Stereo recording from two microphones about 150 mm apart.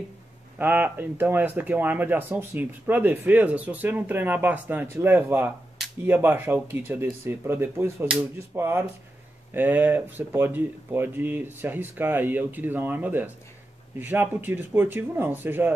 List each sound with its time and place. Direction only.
0.6 s speech: 10° right (ahead or behind)